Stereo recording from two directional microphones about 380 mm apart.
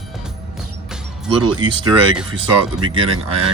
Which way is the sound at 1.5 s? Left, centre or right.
Centre.